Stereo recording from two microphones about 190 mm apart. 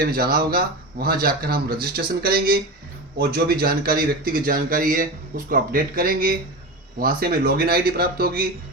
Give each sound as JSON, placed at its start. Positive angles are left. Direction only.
{"t": 0.0, "sound": "speech", "side_deg": -50}